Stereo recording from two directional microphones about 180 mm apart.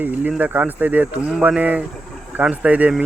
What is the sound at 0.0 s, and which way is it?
Speech, 10° right (ahead or behind).